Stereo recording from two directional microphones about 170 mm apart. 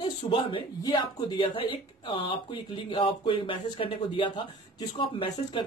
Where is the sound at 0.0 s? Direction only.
30° left (ahead or behind).